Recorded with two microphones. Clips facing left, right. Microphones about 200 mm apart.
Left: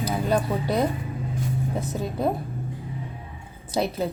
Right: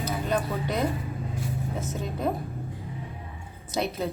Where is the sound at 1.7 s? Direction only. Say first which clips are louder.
Left 4 dB; 35° left (ahead or behind).